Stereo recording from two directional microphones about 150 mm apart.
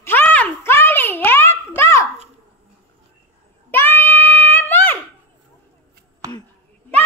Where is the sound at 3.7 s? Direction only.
15° left (ahead or behind).